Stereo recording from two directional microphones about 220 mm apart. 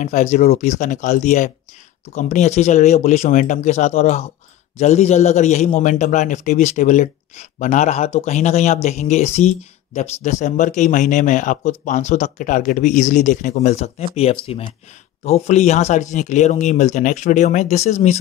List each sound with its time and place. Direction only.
0.0 s speech: 35° left (ahead or behind)